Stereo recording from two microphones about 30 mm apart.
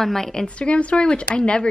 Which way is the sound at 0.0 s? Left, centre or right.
Centre.